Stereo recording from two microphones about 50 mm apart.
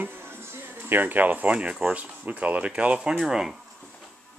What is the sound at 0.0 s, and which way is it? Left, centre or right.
Music, right.